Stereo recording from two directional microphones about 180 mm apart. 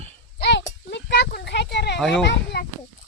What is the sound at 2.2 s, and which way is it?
Speech, 70° left (ahead or behind).